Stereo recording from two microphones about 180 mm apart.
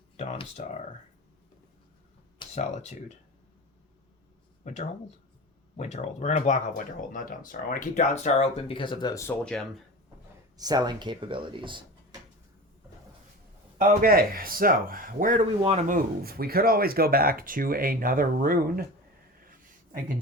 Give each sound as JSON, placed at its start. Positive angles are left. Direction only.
{"t": 0.2, "sound": "speech", "side_deg": 35}
{"t": 2.4, "sound": "speech", "side_deg": 35}
{"t": 4.6, "sound": "speech", "side_deg": 40}
{"t": 9.4, "sound": "speech", "side_deg": 5}
{"t": 10.6, "sound": "speech", "side_deg": -20}
{"t": 13.7, "sound": "speech", "side_deg": -50}
{"t": 15.6, "sound": "speech", "side_deg": -35}
{"t": 16.2, "sound": "speech", "side_deg": -60}